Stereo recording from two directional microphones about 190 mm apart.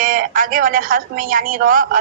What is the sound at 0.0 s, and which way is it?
A woman's voice, 45° right (ahead or behind).